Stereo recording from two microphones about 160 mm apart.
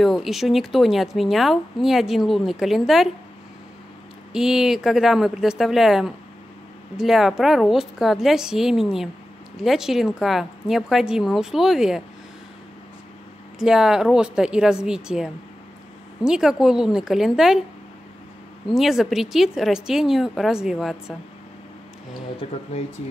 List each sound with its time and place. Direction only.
0.0 s speech: centre (ahead or behind)
4.3 s speech: 5° right (ahead or behind)
13.6 s speech: 5° right (ahead or behind)
16.3 s speech: 5° right (ahead or behind)
18.7 s speech: centre (ahead or behind)
22.4 s speech: 35° left (ahead or behind)